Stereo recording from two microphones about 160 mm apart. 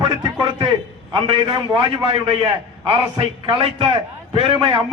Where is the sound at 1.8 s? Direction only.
35° right (ahead or behind).